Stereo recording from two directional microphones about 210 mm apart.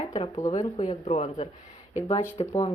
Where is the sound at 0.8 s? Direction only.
30° left (ahead or behind).